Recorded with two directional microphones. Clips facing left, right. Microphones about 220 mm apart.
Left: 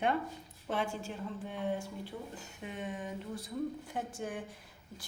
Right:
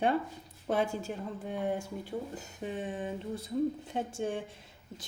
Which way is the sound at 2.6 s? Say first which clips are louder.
Right 5 dB; 30° right (ahead or behind).